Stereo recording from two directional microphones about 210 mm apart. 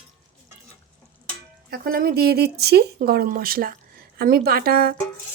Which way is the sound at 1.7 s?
45° right (ahead or behind).